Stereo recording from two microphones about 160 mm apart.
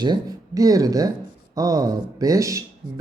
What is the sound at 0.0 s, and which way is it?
Speech, 25° right (ahead or behind).